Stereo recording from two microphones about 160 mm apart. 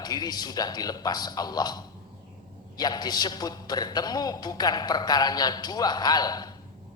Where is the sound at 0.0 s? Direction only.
25° left (ahead or behind).